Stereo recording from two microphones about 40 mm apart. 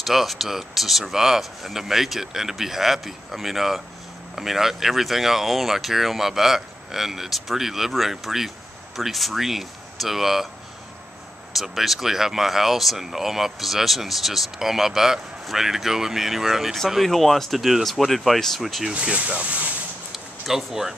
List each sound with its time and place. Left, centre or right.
0.0 s speech: centre
11.5 s speech: centre
17.0 s speech: centre
18.9 s speech: right
20.4 s speech: centre